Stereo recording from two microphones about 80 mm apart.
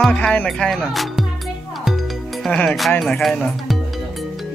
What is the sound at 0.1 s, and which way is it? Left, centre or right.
Speech, centre.